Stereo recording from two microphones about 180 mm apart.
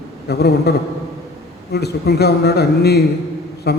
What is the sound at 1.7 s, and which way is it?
A man's voice, 65° left (ahead or behind).